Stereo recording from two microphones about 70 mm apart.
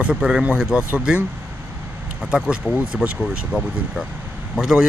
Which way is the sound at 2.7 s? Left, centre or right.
Right.